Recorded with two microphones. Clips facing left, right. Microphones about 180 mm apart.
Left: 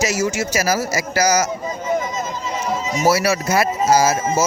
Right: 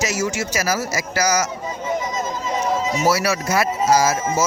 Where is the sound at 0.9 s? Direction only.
30° left (ahead or behind).